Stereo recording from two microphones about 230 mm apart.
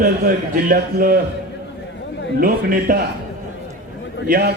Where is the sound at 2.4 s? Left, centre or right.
Right.